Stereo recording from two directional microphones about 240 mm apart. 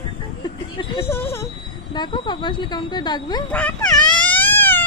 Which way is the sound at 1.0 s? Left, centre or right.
Centre.